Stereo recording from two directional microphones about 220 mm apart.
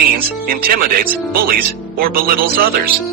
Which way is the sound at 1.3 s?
40° right (ahead or behind).